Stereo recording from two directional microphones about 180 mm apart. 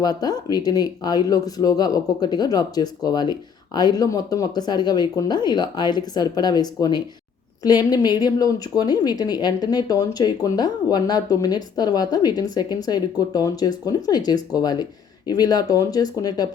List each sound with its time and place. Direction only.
0.0 s a woman's voice: 20° left (ahead or behind)